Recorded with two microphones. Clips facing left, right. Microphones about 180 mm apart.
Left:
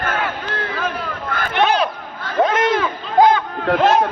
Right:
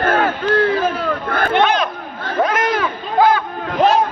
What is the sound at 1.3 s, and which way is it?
Battle cry, 55° right (ahead or behind).